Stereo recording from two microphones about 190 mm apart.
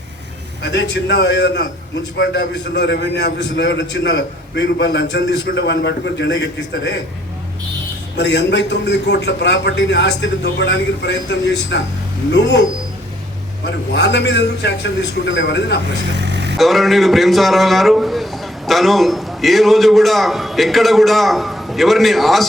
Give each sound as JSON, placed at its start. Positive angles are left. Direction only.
{"t": 0.6, "sound": "a man's voice", "side_deg": 65}
{"t": 8.1, "sound": "a man's voice", "side_deg": 65}
{"t": 13.9, "sound": "a man's voice", "side_deg": 65}
{"t": 16.1, "sound": "vehicle", "side_deg": -65}
{"t": 16.6, "sound": "a man's voice", "side_deg": 0}